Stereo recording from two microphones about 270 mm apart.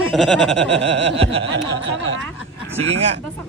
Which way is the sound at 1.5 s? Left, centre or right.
Right.